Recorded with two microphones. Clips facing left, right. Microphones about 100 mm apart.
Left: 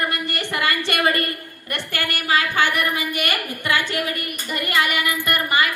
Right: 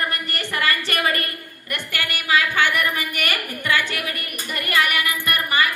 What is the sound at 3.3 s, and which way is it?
Speech, 15° left (ahead or behind).